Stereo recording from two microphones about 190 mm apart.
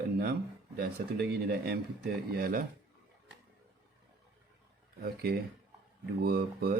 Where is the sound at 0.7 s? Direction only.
55° right (ahead or behind).